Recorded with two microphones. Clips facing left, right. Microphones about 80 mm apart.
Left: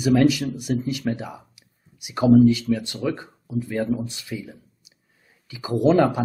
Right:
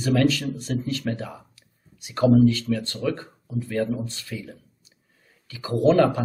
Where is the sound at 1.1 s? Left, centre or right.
Centre.